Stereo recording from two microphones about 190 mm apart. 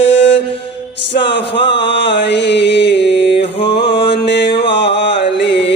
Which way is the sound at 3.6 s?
65° left (ahead or behind).